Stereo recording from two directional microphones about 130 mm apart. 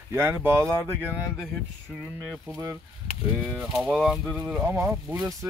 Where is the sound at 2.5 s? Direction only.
20° right (ahead or behind).